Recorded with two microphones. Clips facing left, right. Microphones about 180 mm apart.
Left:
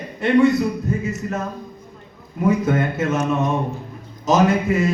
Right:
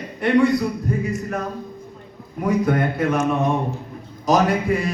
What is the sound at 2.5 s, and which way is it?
Speech, 25° left (ahead or behind).